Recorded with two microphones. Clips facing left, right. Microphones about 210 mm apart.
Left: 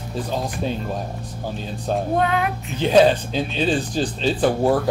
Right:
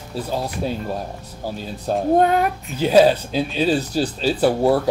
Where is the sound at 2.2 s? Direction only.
45° right (ahead or behind).